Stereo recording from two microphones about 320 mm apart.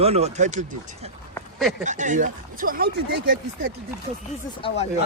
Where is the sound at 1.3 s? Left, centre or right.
Centre.